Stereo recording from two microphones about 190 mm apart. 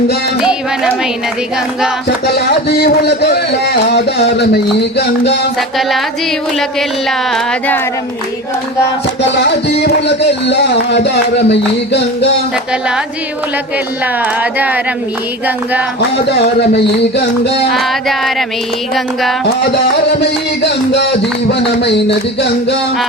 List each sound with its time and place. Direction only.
2.0 s a man's voice: 55° left (ahead or behind)
5.5 s a sound: centre (ahead or behind)
9.2 s a man's voice: 65° left (ahead or behind)
14.2 s speech: 10° right (ahead or behind)
16.1 s a man's voice: 60° left (ahead or behind)
17.7 s a sound: centre (ahead or behind)
20.1 s a man's voice: 65° left (ahead or behind)